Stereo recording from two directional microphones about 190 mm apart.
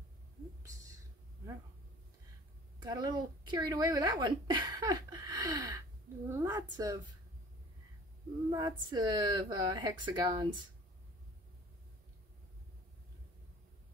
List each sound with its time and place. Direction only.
2.8 s a woman's voice: 20° right (ahead or behind)
8.5 s a woman's voice: 20° right (ahead or behind)